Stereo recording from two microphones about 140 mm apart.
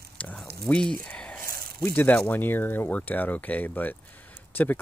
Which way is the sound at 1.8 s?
10° left (ahead or behind).